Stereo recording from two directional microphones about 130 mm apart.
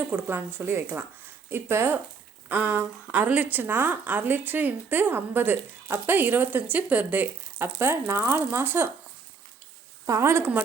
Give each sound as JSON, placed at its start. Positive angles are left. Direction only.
{"t": 0.1, "sound": "a woman's voice", "side_deg": -15}
{"t": 10.1, "sound": "speech", "side_deg": -20}